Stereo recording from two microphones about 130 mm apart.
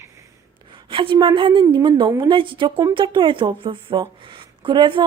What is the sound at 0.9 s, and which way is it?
Speech, 40° right (ahead or behind).